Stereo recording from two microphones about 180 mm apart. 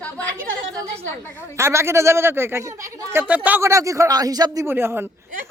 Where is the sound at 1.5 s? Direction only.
15° right (ahead or behind).